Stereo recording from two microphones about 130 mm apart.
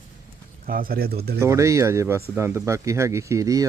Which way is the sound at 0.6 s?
90° right.